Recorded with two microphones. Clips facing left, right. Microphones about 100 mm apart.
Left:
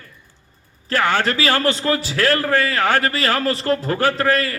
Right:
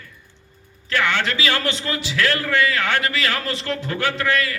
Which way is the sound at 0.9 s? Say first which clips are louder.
Left 3 dB; 40° left (ahead or behind).